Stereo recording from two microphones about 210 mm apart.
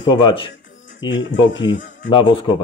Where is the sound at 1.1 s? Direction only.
60° left (ahead or behind).